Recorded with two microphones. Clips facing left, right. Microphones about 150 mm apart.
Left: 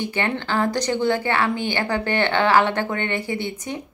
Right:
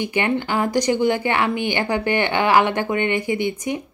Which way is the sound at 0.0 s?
15° right (ahead or behind).